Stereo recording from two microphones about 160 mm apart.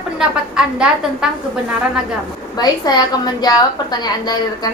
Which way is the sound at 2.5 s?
25° left (ahead or behind).